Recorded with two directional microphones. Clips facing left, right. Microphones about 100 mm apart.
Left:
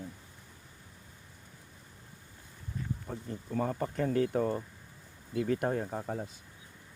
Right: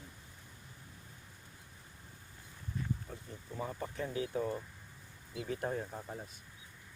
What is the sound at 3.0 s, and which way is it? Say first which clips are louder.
Speech: left 8 dB; 60° left (ahead or behind).